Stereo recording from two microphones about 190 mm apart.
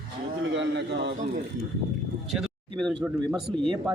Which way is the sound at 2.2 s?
Centre (ahead or behind).